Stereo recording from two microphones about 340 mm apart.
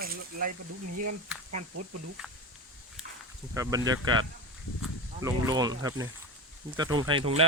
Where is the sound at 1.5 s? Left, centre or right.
Right.